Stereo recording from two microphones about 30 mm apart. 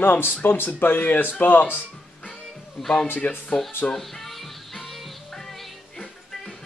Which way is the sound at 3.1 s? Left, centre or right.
Left.